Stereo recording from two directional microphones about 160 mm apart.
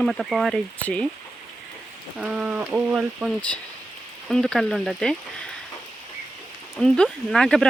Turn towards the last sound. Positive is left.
turn(degrees=5)  # may be behind; listen again after turning